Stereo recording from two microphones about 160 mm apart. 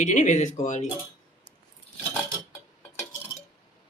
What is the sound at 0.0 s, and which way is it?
Speech, 50° left (ahead or behind).